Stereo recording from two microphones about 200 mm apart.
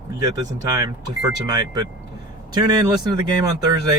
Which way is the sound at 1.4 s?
20° right (ahead or behind).